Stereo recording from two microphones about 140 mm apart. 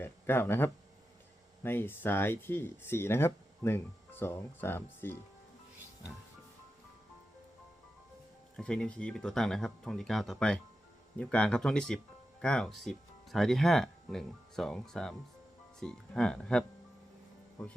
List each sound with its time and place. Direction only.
0.0 s speech: 15° left (ahead or behind)
8.5 s speech: 5° left (ahead or behind)